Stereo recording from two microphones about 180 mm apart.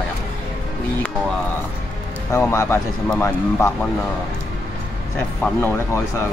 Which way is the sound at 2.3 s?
15° left (ahead or behind).